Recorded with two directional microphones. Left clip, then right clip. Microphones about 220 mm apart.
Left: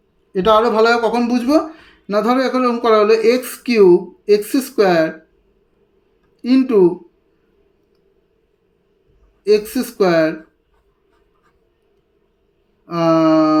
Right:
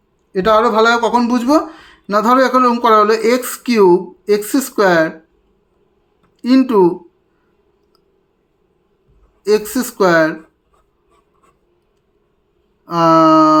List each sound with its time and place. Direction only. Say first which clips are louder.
0.3 s speech: right 1 dB; 10° right (ahead or behind)
6.4 s speech: right 1 dB; 15° right (ahead or behind)
9.4 s speech: even; 15° right (ahead or behind)
12.8 s a sound: right 4 dB; 15° right (ahead or behind)